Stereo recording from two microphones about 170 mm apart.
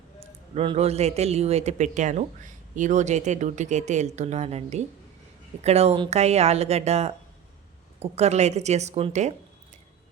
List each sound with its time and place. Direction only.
0.5 s speech: 35° right (ahead or behind)